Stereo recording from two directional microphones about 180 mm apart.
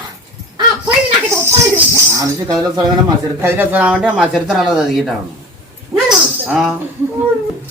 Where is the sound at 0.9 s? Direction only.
15° right (ahead or behind).